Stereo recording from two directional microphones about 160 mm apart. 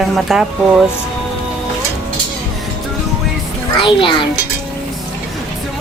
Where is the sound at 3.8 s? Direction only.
30° left (ahead or behind).